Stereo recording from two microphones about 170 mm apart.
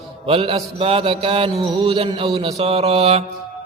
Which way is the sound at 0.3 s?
35° right (ahead or behind).